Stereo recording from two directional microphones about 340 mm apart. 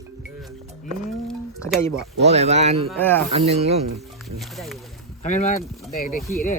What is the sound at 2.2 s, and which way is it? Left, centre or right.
Speech, centre.